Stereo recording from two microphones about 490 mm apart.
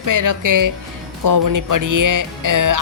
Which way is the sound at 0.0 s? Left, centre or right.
Right.